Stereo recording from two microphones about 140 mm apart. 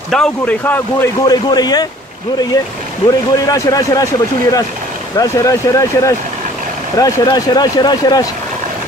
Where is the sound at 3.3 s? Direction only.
25° left (ahead or behind).